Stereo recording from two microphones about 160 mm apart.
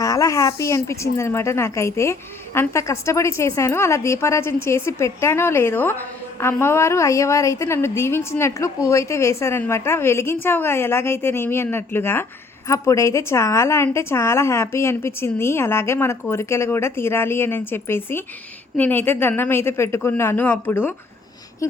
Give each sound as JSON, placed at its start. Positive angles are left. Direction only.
{"t": 0.0, "sound": "a woman's voice", "side_deg": 20}